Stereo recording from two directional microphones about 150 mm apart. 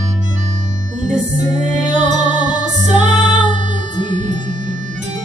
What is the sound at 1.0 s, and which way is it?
Music, 55° right (ahead or behind).